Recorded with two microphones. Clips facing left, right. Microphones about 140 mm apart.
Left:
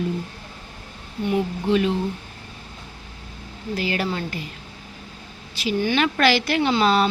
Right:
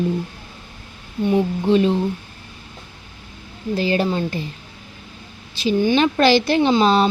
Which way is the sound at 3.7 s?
30° right (ahead or behind).